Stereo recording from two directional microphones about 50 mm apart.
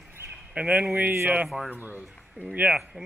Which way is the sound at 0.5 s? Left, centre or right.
Right.